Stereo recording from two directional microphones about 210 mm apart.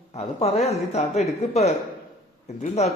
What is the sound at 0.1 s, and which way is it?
A man's voice, 30° left (ahead or behind).